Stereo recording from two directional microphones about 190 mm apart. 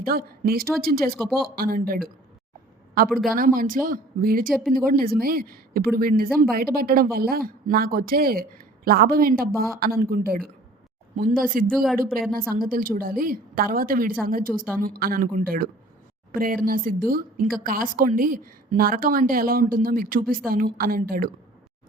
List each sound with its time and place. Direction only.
0.0 s a woman's voice: 50° right (ahead or behind)
1.1 s speech: centre (ahead or behind)
1.5 s a woman's voice: 50° right (ahead or behind)
3.2 s a woman's voice: 45° right (ahead or behind)
11.7 s speech: centre (ahead or behind)
11.9 s a woman's voice: 50° right (ahead or behind)